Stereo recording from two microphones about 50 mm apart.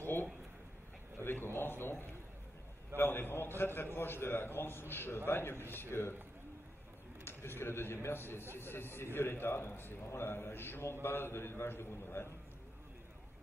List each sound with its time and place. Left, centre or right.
0.0 s a sound: left
3.0 s a man's voice: left
7.2 s a man's voice: left